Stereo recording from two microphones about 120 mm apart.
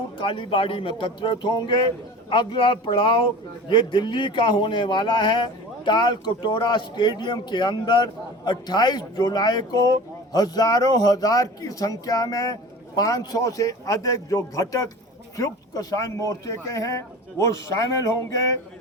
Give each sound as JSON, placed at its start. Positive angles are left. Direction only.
{"t": 0.2, "sound": "a man's voice", "side_deg": 45}